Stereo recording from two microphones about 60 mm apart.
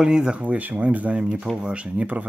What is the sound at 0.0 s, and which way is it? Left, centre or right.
Speech, centre.